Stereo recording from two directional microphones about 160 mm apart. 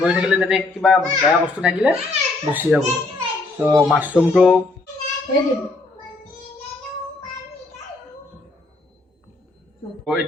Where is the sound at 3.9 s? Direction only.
10° right (ahead or behind).